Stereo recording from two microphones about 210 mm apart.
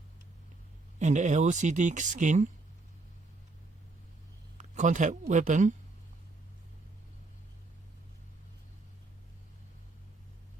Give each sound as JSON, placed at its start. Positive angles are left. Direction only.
{"t": 0.9, "sound": "speech", "side_deg": -35}
{"t": 4.5, "sound": "speech", "side_deg": -35}